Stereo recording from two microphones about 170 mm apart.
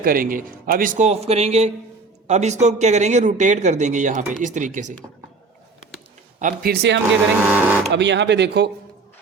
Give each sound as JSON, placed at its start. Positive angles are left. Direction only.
{"t": 0.0, "sound": "speech", "side_deg": -55}
{"t": 6.4, "sound": "speech", "side_deg": -60}
{"t": 7.3, "sound": "speech", "side_deg": -10}
{"t": 7.9, "sound": "speech", "side_deg": -90}